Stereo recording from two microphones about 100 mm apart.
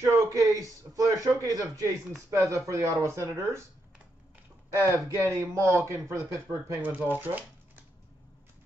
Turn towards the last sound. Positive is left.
turn(degrees=-20)  # may be behind; listen again after turning